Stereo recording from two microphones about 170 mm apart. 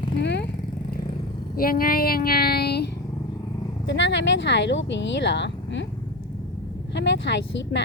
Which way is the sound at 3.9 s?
90° left.